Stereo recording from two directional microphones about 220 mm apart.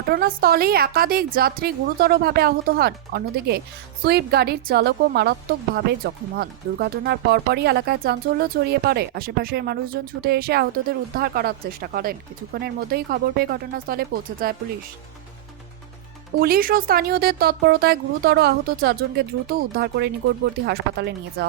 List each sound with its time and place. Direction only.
0.1 s a woman's voice: 45° right (ahead or behind)
16.4 s a woman's voice: 40° right (ahead or behind)